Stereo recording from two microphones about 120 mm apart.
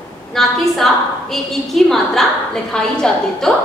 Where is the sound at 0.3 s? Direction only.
5° left (ahead or behind).